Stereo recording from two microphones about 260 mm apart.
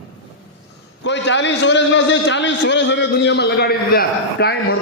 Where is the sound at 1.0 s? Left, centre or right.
Left.